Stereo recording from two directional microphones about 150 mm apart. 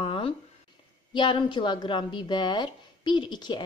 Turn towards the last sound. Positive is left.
turn(degrees=30)  # may be behind; listen again after turning